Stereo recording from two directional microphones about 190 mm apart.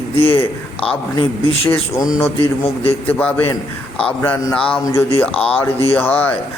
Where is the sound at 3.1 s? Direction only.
10° left (ahead or behind).